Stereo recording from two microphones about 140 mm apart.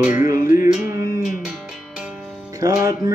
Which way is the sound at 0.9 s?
25° right (ahead or behind).